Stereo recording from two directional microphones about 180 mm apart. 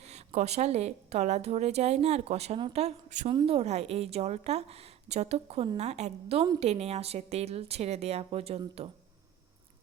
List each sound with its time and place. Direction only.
0.0 s a woman's voice: 35° right (ahead or behind)